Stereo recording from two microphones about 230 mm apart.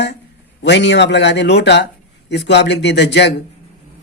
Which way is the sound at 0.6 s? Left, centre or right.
Left.